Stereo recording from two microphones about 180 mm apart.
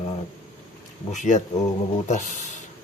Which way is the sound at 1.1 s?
40° left (ahead or behind).